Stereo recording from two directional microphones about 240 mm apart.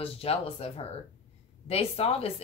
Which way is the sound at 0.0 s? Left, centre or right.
Left.